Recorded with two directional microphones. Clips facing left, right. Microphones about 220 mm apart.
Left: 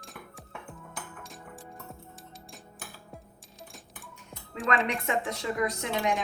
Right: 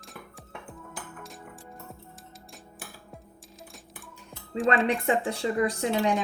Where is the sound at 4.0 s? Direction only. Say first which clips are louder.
Right 1 dB; centre (ahead or behind).